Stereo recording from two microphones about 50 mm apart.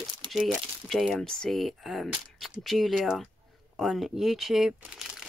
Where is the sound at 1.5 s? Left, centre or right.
Centre.